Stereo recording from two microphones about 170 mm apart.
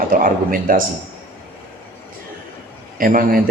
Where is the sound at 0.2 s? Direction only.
55° right (ahead or behind).